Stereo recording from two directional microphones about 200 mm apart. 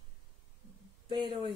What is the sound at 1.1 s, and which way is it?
Speech, 25° right (ahead or behind).